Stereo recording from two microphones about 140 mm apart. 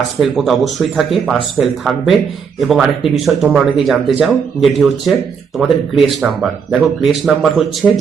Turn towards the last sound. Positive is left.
turn(degrees=0)  # may be behind; listen again after turning